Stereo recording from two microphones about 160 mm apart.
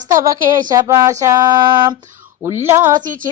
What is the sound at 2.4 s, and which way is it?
Female singing, 15° right (ahead or behind).